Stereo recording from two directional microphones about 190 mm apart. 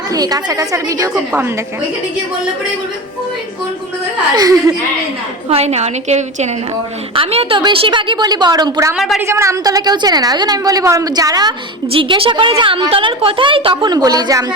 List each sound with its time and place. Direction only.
0.1 s a woman's voice: 20° right (ahead or behind)
1.1 s a woman's voice: 5° right (ahead or behind)
4.4 s a woman's voice: 20° right (ahead or behind)
5.5 s a woman's voice: 35° right (ahead or behind)